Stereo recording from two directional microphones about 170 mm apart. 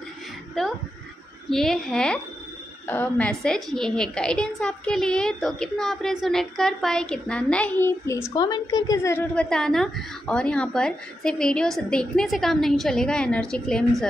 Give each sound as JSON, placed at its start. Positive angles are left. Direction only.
{"t": 0.6, "sound": "a woman's voice", "side_deg": 0}
{"t": 8.4, "sound": "a woman's voice", "side_deg": 25}
{"t": 9.3, "sound": "a woman's voice", "side_deg": 5}